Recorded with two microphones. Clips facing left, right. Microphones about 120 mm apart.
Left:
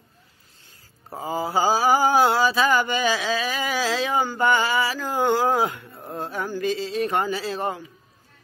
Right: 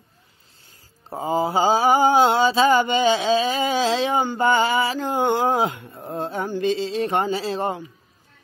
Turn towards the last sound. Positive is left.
turn(degrees=-25)  # may be behind; listen again after turning